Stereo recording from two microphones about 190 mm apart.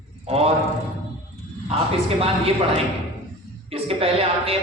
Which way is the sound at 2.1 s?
30° right (ahead or behind).